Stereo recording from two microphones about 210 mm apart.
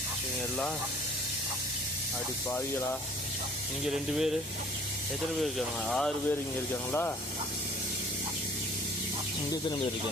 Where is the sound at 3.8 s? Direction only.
Centre (ahead or behind).